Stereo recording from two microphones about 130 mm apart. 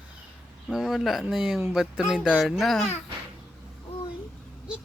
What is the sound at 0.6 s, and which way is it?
Speech, centre (ahead or behind).